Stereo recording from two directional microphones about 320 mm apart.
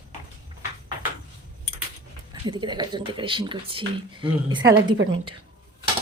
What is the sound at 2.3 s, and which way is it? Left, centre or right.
Speech, centre.